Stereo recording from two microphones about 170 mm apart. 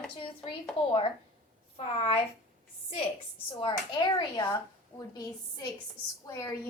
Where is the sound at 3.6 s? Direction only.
25° left (ahead or behind).